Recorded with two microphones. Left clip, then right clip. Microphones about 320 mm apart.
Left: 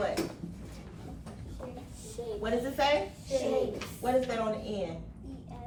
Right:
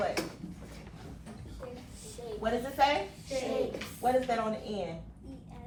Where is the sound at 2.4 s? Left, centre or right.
Centre.